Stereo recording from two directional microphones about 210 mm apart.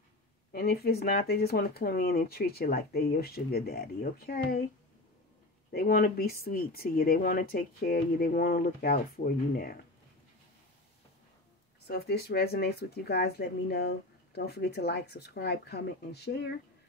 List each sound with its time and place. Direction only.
0.5 s speech: 45° left (ahead or behind)
5.7 s speech: 45° left (ahead or behind)
11.9 s speech: 50° left (ahead or behind)